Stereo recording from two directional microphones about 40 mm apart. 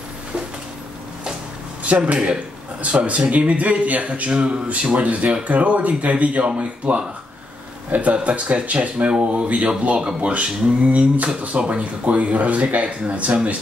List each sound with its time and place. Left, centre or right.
1.8 s speech: right
6.4 s speech: right
7.9 s speech: right